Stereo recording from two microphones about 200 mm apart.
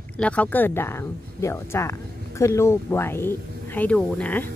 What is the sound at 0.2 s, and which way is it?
Speech, 5° left (ahead or behind).